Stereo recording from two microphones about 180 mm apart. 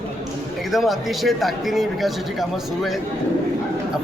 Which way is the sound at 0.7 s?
Centre (ahead or behind).